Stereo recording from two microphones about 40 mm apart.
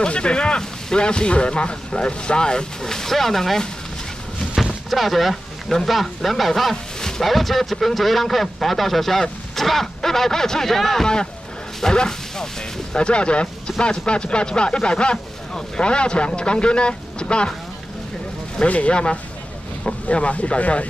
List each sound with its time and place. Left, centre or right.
0.0 s speech: left; by 3.6 s centre
4.8 s speech: centre; by 17.5 s left
18.7 s speech: left